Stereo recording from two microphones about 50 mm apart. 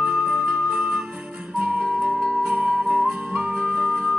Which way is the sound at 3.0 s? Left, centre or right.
Right.